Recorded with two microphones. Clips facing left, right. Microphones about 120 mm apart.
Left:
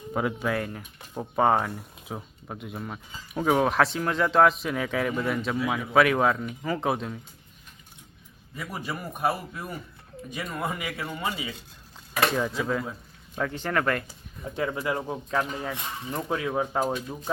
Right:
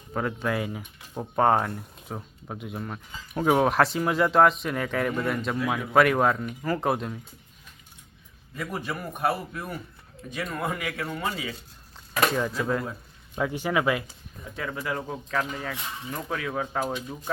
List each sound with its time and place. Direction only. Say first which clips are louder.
0.1 s speech: left 1 dB; 10° left (ahead or behind)
0.5 s speech: even; 5° right (ahead or behind)
8.5 s speech: right 2 dB; 5° left (ahead or behind)
12.2 s speech: even; centre (ahead or behind)
14.5 s speech: left 3 dB; 30° left (ahead or behind); by 17.4 s 10° left (ahead or behind)